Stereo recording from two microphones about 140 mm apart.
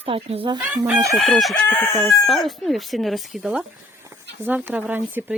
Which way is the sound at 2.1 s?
Centre (ahead or behind).